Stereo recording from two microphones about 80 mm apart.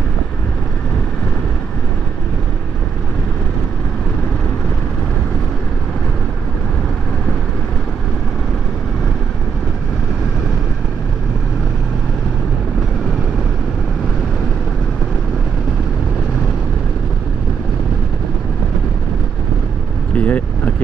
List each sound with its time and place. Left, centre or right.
20.2 s vehicle: centre